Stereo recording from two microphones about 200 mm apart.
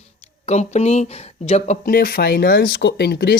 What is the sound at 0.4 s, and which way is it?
Speech, 35° left (ahead or behind).